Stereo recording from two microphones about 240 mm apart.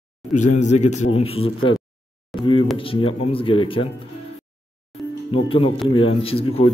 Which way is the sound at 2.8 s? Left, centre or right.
Left.